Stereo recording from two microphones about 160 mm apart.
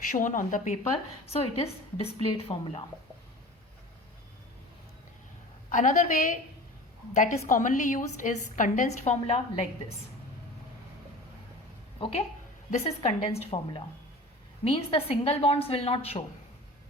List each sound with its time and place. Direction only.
0.1 s a woman's voice: 55° left (ahead or behind)
1.3 s a woman's voice: 40° left (ahead or behind)
5.6 s a woman's voice: 50° left (ahead or behind)
11.9 s a woman's voice: 35° left (ahead or behind)